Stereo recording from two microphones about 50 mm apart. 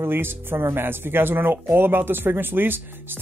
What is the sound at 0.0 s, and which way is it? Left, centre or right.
Speech, right.